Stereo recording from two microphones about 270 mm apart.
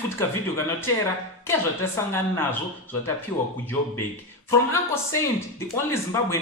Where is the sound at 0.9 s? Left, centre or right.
Centre.